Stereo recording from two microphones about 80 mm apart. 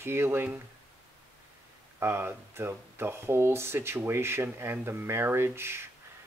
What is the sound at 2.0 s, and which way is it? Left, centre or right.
Speech, right.